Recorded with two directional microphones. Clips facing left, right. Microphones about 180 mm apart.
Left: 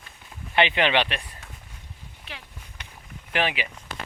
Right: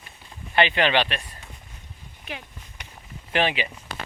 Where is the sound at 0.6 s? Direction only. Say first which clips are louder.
Right 1 dB; 20° left (ahead or behind).